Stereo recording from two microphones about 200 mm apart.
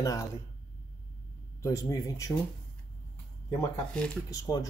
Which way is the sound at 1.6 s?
15° left (ahead or behind).